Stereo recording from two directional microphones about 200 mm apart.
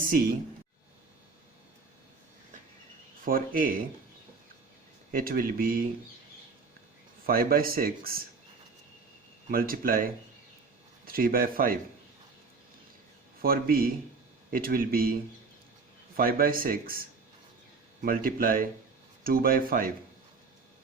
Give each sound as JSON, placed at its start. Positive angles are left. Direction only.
{"t": 3.2, "sound": "speech", "side_deg": -45}
{"t": 5.1, "sound": "speech", "side_deg": -45}
{"t": 7.3, "sound": "speech", "side_deg": -45}
{"t": 9.5, "sound": "speech", "side_deg": -50}
{"t": 13.4, "sound": "speech", "side_deg": -50}
{"t": 16.1, "sound": "speech", "side_deg": -45}